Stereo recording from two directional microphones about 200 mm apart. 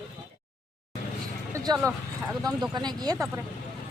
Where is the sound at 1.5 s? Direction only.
20° right (ahead or behind).